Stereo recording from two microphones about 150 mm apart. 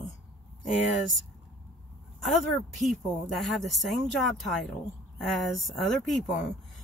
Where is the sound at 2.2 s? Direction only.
Centre (ahead or behind).